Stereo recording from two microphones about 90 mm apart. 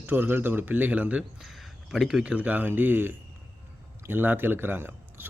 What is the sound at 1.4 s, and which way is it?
A man's voice, centre (ahead or behind).